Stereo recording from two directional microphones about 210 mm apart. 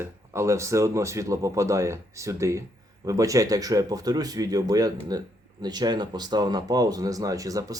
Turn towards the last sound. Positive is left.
turn(degrees=-15)  # may be behind; listen again after turning